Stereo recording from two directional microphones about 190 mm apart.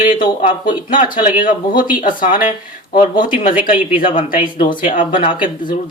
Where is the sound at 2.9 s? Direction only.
25° left (ahead or behind).